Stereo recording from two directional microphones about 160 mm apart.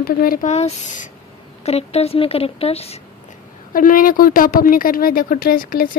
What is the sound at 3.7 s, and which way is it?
Speech, 60° left (ahead or behind).